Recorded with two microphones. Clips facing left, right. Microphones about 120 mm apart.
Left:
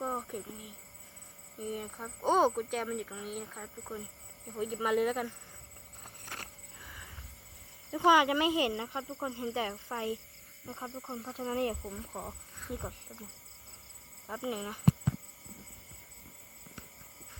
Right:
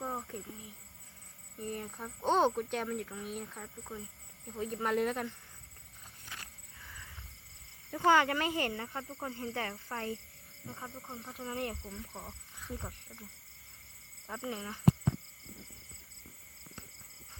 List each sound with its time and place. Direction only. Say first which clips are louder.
0.0 s a sound: left 3 dB; 15° left (ahead or behind)
1.5 s speech: left 2 dB; 5° left (ahead or behind)
6.2 s vehicle: left 4 dB; 50° left (ahead or behind)
7.9 s speech: left 2 dB; 15° left (ahead or behind)
12.1 s speech: left 5 dB; 40° left (ahead or behind)
12.8 s speech: left 4 dB; 15° left (ahead or behind)
14.3 s speech: left 3 dB; 15° left (ahead or behind)